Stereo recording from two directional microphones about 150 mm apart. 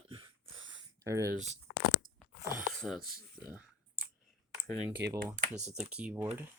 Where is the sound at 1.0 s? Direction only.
20° right (ahead or behind).